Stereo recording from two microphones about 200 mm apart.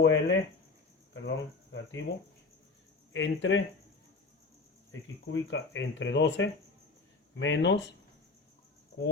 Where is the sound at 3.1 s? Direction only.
70° left (ahead or behind).